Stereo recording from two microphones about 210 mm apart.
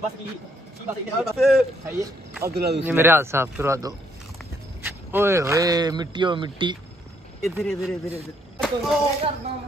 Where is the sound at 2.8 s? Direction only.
10° right (ahead or behind).